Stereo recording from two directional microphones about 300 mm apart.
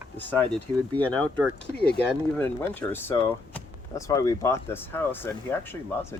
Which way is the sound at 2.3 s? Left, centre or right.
Centre.